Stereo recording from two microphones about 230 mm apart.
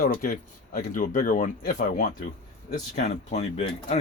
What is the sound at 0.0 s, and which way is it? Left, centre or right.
Speech, left.